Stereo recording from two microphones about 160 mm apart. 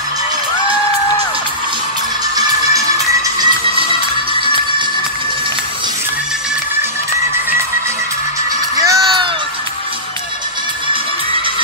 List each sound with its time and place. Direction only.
2.3 s music: 20° right (ahead or behind)
4.4 s music: 30° right (ahead or behind)
8.7 s music: 20° right (ahead or behind)